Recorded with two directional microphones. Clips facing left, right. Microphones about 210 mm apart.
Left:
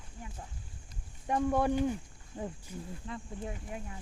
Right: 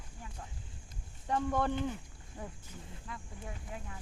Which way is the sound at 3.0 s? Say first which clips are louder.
Left 5 dB; 25° left (ahead or behind).